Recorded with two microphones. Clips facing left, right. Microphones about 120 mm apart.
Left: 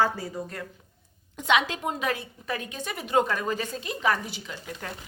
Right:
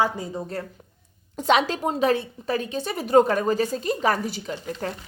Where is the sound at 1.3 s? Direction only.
35° right (ahead or behind).